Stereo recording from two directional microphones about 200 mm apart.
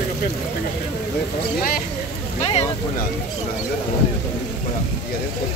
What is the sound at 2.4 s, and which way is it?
Vehicle, 30° left (ahead or behind).